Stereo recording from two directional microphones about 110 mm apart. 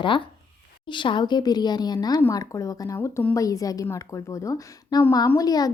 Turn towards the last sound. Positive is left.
turn(degrees=35)  # may be behind; listen again after turning